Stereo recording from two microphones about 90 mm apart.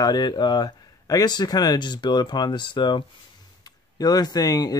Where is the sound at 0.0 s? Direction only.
50° left (ahead or behind).